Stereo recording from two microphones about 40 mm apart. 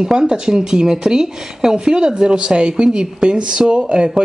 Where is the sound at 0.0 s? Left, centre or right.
Centre.